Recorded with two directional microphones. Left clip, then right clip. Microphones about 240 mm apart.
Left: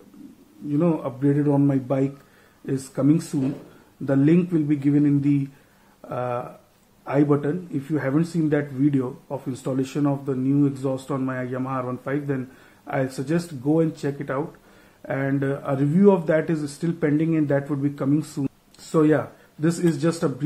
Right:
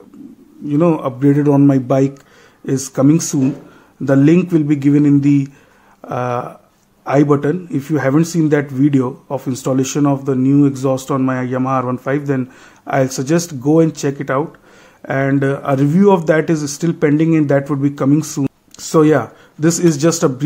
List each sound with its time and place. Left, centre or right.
0.7 s speech: right